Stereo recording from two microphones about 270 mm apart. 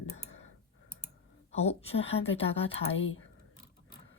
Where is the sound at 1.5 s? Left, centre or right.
Left.